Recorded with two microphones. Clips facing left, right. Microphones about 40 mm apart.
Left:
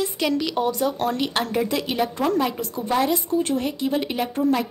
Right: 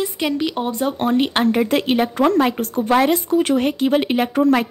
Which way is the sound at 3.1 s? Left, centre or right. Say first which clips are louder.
Right 5 dB; right.